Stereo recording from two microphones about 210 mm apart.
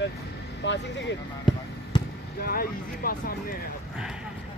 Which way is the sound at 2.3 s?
45° left (ahead or behind).